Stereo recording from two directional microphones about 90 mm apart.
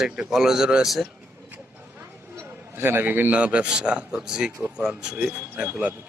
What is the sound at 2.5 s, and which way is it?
A man's voice, 25° right (ahead or behind).